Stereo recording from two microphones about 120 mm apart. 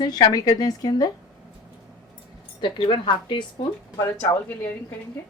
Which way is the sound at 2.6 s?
45° left (ahead or behind).